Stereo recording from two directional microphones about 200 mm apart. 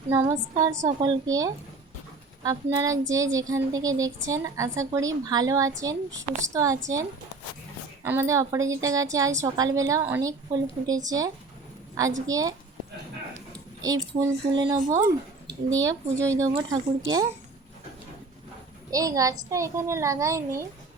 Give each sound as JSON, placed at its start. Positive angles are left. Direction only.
{"t": 0.1, "sound": "speech", "side_deg": -15}
{"t": 12.3, "sound": "speech", "side_deg": -15}
{"t": 13.8, "sound": "speech", "side_deg": -15}
{"t": 18.9, "sound": "speech", "side_deg": -15}